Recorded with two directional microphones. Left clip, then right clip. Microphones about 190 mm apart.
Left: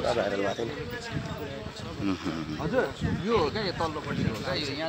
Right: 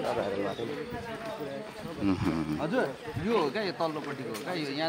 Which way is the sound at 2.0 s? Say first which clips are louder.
Right 2 dB; 15° right (ahead or behind).